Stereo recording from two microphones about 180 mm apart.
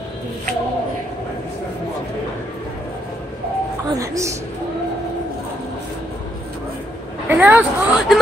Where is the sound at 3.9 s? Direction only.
15° right (ahead or behind).